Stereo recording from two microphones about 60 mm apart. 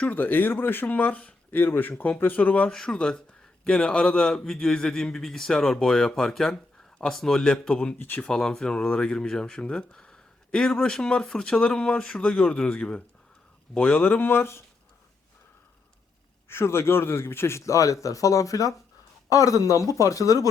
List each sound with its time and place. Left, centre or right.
0.1 s speech: left
1.5 s speech: left
2.6 s speech: centre
7.9 s speech: left
8.3 s speech: centre
13.7 s speech: left
16.5 s speech: left
17.7 s speech: left